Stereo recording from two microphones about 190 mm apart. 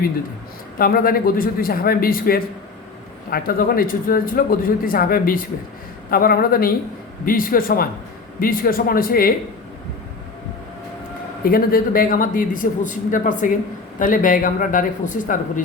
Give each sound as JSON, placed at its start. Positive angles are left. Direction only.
{"t": 0.8, "sound": "a man's voice", "side_deg": 50}
{"t": 11.4, "sound": "a man's voice", "side_deg": 50}